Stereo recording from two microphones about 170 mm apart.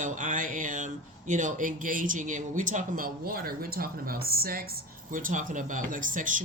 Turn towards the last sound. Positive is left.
turn(degrees=-50)  # may be behind; listen again after turning